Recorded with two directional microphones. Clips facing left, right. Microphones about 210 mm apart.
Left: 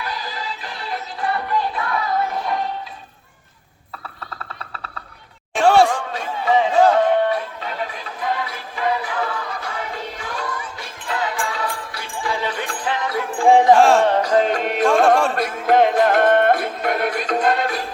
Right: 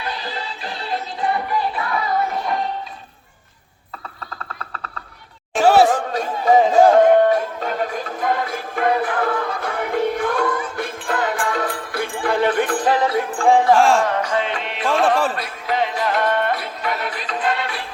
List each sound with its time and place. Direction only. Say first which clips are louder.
0.6 s music: right 3 dB; 30° right (ahead or behind)
1.7 s music: even; centre (ahead or behind)
5.5 s a sound: right 1 dB; 5° right (ahead or behind)
5.9 s chatter: right 4 dB; 40° right (ahead or behind)
6.9 s music: right 5 dB; 45° right (ahead or behind)
13.4 s music: left 2 dB; 15° left (ahead or behind)
13.7 s music: left 2 dB; centre (ahead or behind)
14.0 s music: left 4 dB; 35° left (ahead or behind)